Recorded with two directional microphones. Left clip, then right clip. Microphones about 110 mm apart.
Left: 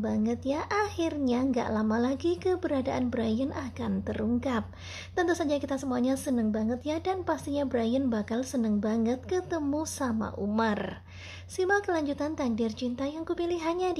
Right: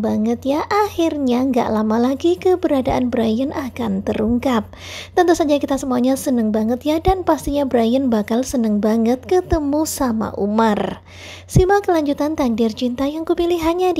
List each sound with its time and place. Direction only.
0.0 s a child's voice: 50° right (ahead or behind)